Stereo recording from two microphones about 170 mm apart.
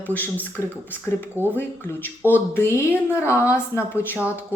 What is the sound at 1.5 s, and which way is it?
A woman's voice, 10° left (ahead or behind).